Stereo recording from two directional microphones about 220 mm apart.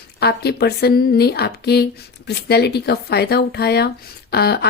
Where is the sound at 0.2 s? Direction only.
45° left (ahead or behind).